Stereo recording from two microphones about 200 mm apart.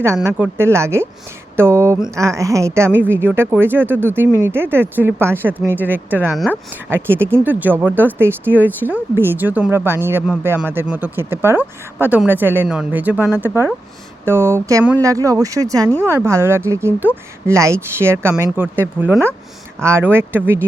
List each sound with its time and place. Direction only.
0.0 s speech: 10° right (ahead or behind)
6.9 s speech: 10° right (ahead or behind)